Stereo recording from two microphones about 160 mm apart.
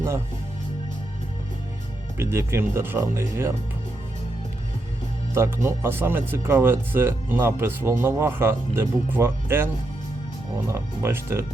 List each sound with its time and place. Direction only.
2.1 s speech: 15° right (ahead or behind)
5.3 s speech: 15° right (ahead or behind)
10.7 s speech: 15° right (ahead or behind)